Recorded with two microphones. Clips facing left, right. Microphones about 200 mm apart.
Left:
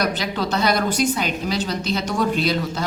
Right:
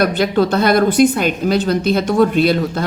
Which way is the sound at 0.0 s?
55° right (ahead or behind).